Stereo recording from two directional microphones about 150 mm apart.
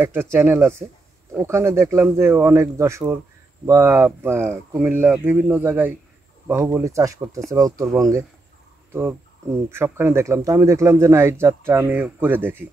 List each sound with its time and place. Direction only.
0.0 s speech: 15° right (ahead or behind)